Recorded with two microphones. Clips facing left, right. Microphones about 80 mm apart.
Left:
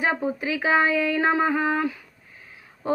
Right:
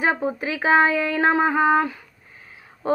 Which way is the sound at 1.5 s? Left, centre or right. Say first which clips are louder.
Right 5 dB; right.